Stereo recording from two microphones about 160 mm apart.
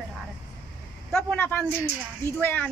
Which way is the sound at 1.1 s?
10° left (ahead or behind).